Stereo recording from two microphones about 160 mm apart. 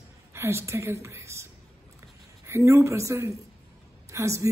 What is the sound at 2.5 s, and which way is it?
A woman's voice, 15° right (ahead or behind).